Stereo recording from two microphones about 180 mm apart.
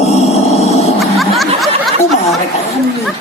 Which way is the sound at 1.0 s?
Centre (ahead or behind).